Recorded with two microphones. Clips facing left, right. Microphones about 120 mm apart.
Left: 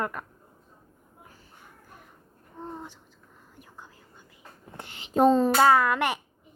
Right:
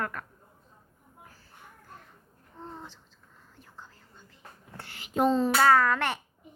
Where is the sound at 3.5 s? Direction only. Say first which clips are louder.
Left 1 dB; 15° left (ahead or behind).